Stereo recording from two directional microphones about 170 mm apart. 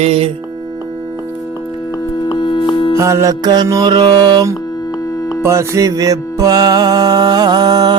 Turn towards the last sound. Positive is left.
turn(degrees=-25)  # may be behind; listen again after turning